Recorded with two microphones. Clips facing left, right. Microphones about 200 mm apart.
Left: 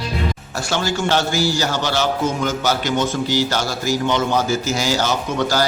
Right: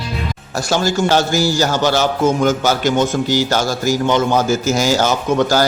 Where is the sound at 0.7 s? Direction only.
40° right (ahead or behind).